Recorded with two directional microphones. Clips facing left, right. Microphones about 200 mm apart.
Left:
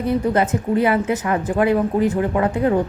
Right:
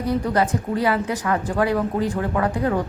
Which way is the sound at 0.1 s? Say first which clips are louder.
Left 2 dB; 20° left (ahead or behind).